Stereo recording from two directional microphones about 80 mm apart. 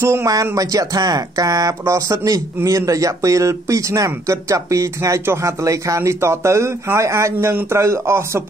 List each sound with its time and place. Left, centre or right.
0.0 s speech: right